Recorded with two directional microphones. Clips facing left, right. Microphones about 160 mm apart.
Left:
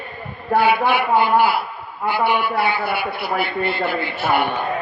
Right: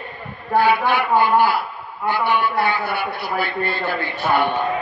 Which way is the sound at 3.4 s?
15° left (ahead or behind).